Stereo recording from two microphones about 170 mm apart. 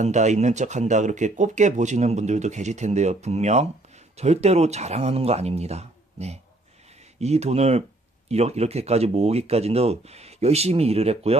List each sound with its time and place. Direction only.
0.0 s speech: 45° right (ahead or behind)